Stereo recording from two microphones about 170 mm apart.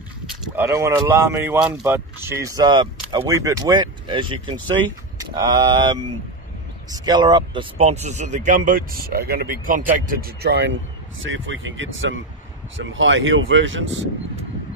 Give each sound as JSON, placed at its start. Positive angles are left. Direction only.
{"t": 0.6, "sound": "speech", "side_deg": -15}
{"t": 7.8, "sound": "speech", "side_deg": -40}
{"t": 11.3, "sound": "speech", "side_deg": -90}